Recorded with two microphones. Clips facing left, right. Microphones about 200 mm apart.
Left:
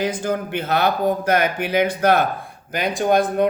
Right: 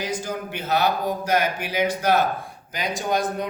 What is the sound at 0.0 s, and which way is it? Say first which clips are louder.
Speech: left 6 dB; 55° left (ahead or behind).